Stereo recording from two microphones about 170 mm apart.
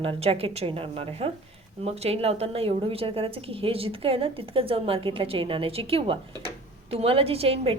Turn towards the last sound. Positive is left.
turn(degrees=-35)  # may be behind; listen again after turning